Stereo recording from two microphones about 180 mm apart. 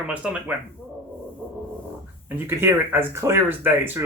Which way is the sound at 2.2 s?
10° right (ahead or behind).